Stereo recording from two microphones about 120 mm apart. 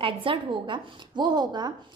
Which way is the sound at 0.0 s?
50° right (ahead or behind).